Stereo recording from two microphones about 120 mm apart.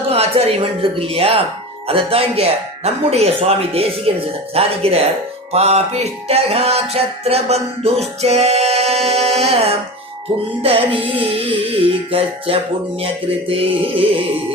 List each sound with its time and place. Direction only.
0.1 s speech: 55° right (ahead or behind)
1.9 s music: 55° right (ahead or behind)
10.6 s speech: 50° right (ahead or behind)